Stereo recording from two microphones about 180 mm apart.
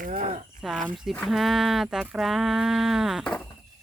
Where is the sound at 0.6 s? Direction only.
Centre (ahead or behind).